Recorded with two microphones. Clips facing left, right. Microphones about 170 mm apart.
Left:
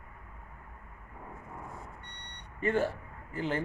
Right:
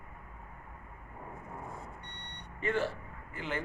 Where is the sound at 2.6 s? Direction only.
45° left (ahead or behind).